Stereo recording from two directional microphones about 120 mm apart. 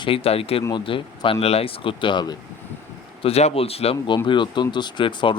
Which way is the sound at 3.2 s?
60° left (ahead or behind).